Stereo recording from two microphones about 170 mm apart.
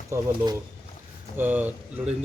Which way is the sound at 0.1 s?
15° right (ahead or behind).